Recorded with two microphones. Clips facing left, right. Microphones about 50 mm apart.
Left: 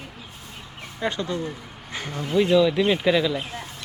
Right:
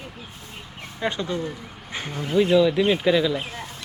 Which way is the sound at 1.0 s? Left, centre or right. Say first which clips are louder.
Even; right.